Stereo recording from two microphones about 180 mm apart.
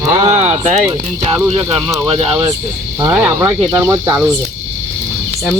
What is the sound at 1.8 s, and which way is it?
Speech, 20° right (ahead or behind).